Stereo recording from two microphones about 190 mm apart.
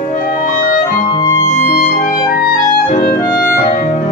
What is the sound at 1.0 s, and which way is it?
Music, 25° left (ahead or behind).